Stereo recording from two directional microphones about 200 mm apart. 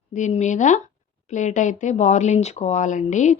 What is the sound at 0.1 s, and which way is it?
Speech, 35° left (ahead or behind).